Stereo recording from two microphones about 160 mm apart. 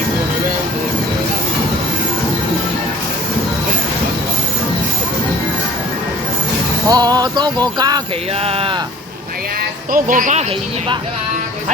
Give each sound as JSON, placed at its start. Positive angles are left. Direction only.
{"t": 6.8, "sound": "music", "side_deg": -25}
{"t": 8.4, "sound": "speech", "side_deg": -35}
{"t": 9.9, "sound": "speech", "side_deg": -55}